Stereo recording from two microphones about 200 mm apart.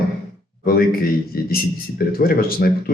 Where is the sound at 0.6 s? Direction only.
50° left (ahead or behind).